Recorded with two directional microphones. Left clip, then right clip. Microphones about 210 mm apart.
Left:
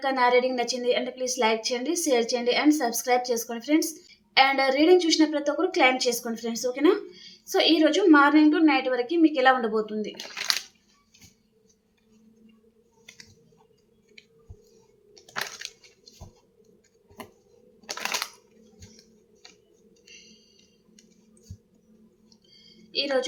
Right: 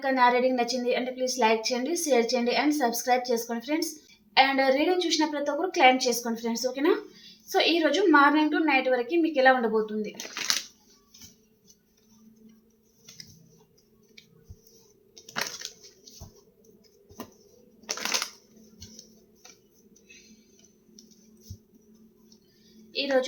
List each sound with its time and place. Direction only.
0.0 s a woman's voice: 20° left (ahead or behind)
10.2 s speech: 10° left (ahead or behind)
15.1 s crushing: 10° left (ahead or behind)
17.8 s shuffling cards: 10° left (ahead or behind)